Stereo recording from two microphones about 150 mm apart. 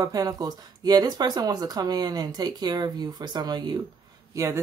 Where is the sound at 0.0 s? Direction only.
25° right (ahead or behind).